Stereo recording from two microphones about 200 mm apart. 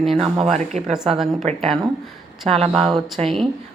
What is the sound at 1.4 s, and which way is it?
A woman's voice, 35° right (ahead or behind).